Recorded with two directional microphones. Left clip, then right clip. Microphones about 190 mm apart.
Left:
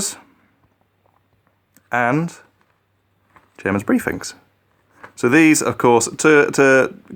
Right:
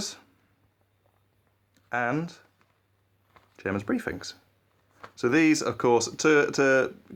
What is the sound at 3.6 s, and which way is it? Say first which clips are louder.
Speech: left 10 dB; 40° left (ahead or behind).